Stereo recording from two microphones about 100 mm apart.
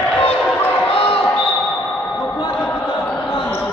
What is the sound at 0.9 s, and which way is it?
Basketball bounce, 90° left.